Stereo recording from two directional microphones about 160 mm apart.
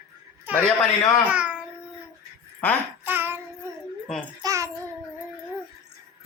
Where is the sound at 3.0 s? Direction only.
15° right (ahead or behind).